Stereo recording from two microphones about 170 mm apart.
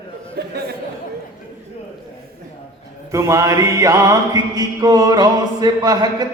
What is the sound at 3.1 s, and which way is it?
Mantra, 15° right (ahead or behind).